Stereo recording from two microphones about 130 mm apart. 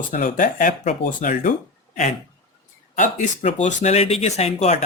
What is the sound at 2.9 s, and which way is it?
Speech, 70° left (ahead or behind).